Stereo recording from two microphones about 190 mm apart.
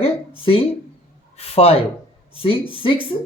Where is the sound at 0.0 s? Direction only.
30° left (ahead or behind).